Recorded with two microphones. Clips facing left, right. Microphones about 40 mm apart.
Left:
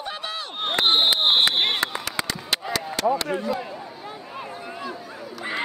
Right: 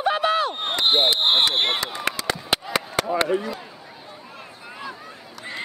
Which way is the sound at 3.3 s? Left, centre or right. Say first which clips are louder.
Right 1 dB; centre.